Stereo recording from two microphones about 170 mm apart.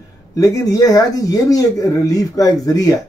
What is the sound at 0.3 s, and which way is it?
Speech, 20° left (ahead or behind).